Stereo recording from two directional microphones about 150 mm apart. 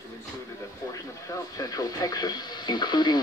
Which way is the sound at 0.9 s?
25° left (ahead or behind).